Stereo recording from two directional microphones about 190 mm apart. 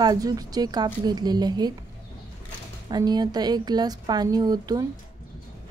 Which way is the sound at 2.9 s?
20° right (ahead or behind).